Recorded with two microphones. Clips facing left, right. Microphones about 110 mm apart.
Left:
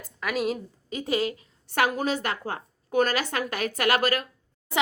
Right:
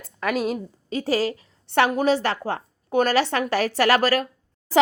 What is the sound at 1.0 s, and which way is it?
A woman's voice, 35° right (ahead or behind).